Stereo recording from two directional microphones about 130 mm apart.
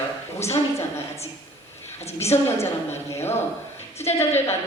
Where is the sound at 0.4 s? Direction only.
20° left (ahead or behind).